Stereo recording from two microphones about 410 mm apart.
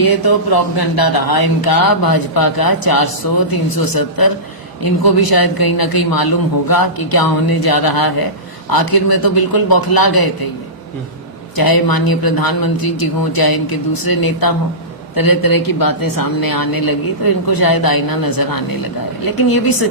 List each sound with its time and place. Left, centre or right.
0.0 s speech: left
11.5 s speech: left